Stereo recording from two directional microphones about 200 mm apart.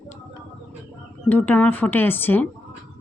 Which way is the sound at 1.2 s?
10° left (ahead or behind).